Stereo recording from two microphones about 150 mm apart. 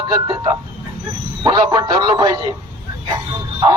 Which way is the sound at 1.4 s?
30° right (ahead or behind).